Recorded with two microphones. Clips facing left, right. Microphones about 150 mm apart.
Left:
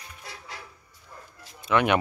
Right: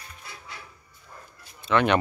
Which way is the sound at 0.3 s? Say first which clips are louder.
Left 2 dB; 90° left.